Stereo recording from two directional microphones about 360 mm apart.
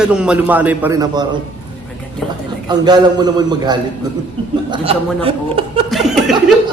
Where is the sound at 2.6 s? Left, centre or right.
Centre.